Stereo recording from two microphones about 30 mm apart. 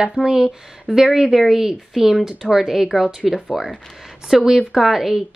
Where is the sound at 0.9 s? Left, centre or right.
Right.